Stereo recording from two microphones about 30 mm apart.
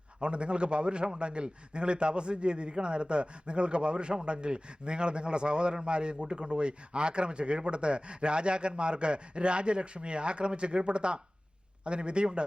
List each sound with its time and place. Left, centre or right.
0.2 s speech: right